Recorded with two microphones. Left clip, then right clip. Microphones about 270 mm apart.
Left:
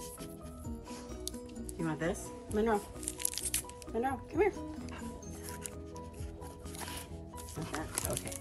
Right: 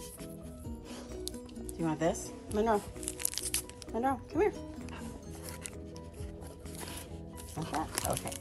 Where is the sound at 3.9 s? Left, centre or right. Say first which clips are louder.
Right 1 dB; centre.